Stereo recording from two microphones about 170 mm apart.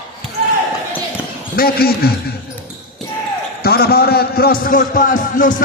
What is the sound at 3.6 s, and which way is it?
A man's voice, 65° left (ahead or behind).